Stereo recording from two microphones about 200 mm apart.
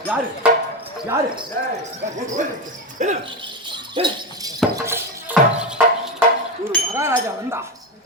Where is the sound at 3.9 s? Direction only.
20° right (ahead or behind).